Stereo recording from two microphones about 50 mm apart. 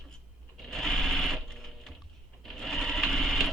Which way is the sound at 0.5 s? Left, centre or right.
Centre.